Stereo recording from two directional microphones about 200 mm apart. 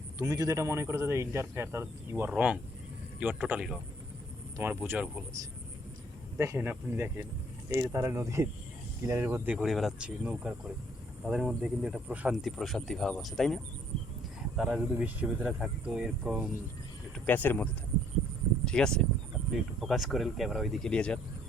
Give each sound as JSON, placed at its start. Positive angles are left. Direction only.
{"t": 0.2, "sound": "speech", "side_deg": -15}
{"t": 6.3, "sound": "speech", "side_deg": -15}
{"t": 17.2, "sound": "speech", "side_deg": 10}